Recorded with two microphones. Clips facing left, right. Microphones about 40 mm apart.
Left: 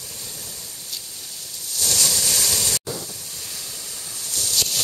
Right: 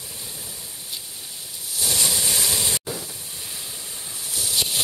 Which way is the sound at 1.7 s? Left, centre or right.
Centre.